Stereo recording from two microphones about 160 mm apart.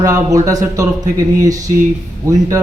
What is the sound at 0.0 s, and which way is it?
Speech, 20° right (ahead or behind).